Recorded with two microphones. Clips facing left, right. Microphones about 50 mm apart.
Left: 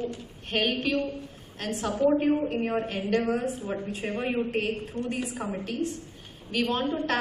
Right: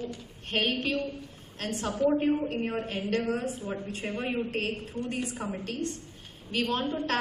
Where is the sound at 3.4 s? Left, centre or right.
Centre.